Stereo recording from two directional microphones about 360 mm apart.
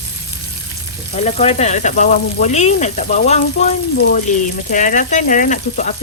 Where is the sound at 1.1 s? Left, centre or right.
Centre.